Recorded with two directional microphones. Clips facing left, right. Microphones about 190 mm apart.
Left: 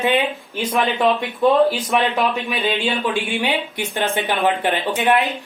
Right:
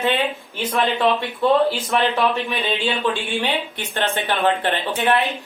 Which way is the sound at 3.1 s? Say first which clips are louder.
Left 2 dB; 15° left (ahead or behind).